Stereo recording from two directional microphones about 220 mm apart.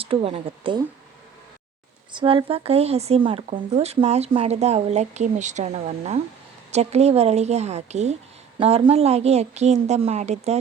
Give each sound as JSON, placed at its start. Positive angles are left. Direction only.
{"t": 0.0, "sound": "speech", "side_deg": -25}
{"t": 2.1, "sound": "speech", "side_deg": -25}